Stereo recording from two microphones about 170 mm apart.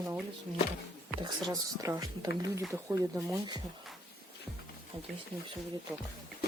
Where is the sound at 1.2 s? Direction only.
20° right (ahead or behind).